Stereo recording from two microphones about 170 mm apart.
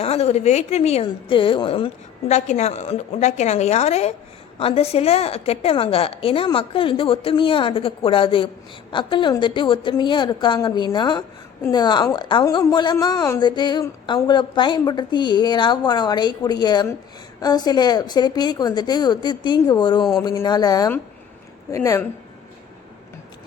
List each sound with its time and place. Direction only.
0.0 s a woman's voice: 40° left (ahead or behind)
20.0 s a sound: centre (ahead or behind)
20.2 s a woman's voice: 20° left (ahead or behind)